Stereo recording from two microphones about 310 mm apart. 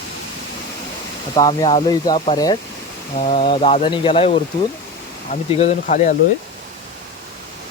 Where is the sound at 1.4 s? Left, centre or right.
Centre.